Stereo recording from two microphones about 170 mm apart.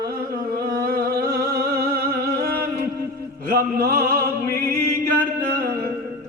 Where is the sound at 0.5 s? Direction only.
60° right (ahead or behind).